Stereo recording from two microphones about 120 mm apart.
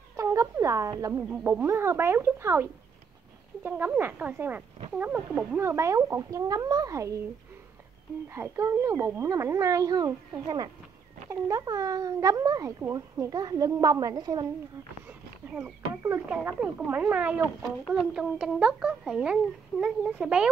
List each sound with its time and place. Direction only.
0.1 s a sound: 25° right (ahead or behind)
1.0 s a child's voice: 20° right (ahead or behind)
5.6 s speech: 20° right (ahead or behind)
8.3 s speech: 20° right (ahead or behind)
11.2 s speech: 25° right (ahead or behind)
15.0 s a child's voice: 10° right (ahead or behind)